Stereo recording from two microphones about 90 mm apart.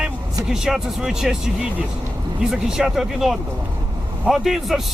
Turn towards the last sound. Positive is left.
turn(degrees=0)  # may be behind; listen again after turning